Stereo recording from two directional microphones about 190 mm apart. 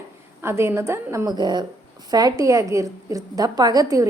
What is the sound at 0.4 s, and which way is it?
A woman's voice, 15° right (ahead or behind).